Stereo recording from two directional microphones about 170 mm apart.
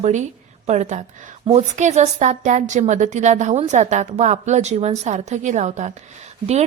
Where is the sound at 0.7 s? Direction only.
40° right (ahead or behind).